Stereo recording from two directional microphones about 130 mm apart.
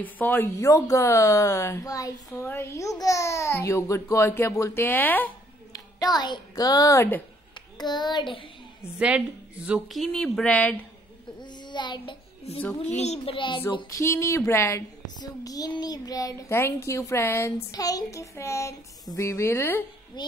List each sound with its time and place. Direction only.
0.0 s a child's voice: 15° left (ahead or behind)
5.9 s a child's voice: 30° left (ahead or behind)
8.9 s speech: 10° right (ahead or behind)
10.0 s speech: 5° left (ahead or behind)
11.7 s a child's voice: 35° left (ahead or behind)
12.9 s a child's voice: 55° left (ahead or behind)
13.8 s a child's voice: 25° left (ahead or behind)
20.2 s a child's voice: 35° left (ahead or behind)